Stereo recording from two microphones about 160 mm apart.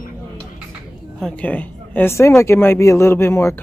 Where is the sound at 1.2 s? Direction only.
10° left (ahead or behind).